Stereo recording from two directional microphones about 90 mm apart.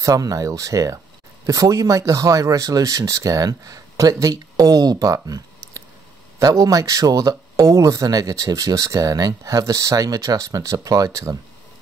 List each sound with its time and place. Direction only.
0.0 s speech: 40° right (ahead or behind)